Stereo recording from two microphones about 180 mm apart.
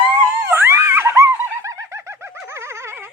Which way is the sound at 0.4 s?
15° right (ahead or behind).